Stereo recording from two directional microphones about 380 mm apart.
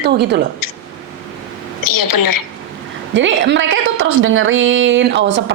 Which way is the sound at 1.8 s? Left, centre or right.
Left.